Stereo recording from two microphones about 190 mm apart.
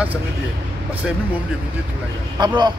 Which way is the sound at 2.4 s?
25° right (ahead or behind).